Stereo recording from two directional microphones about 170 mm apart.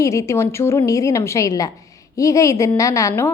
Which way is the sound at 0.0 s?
20° left (ahead or behind).